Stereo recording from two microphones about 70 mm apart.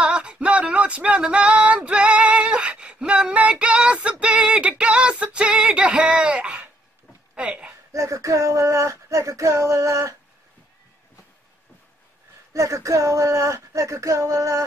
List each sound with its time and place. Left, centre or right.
0.0 s a sound: centre
7.9 s speech: right
12.5 s speech: right